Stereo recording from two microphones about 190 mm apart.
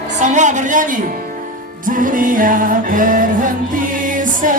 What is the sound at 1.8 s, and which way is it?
Music, 45° right (ahead or behind).